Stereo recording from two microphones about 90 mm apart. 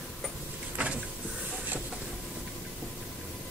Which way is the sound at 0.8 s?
15° right (ahead or behind).